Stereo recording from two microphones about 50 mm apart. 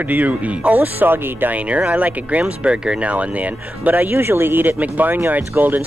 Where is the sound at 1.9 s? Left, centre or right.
Right.